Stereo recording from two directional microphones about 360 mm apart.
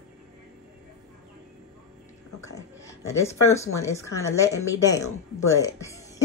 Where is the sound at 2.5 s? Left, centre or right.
Centre.